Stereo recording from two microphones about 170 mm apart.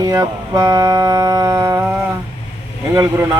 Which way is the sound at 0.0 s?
20° right (ahead or behind).